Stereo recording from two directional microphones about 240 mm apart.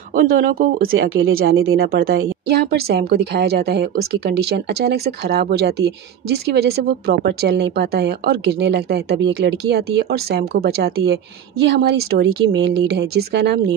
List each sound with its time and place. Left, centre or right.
0.1 s speech: right
4.8 s speech: right